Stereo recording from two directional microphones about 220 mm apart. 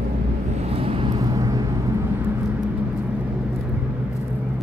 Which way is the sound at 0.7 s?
25° right (ahead or behind).